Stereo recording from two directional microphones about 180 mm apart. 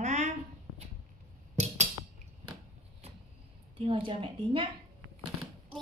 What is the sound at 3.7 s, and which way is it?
Speech, 30° right (ahead or behind).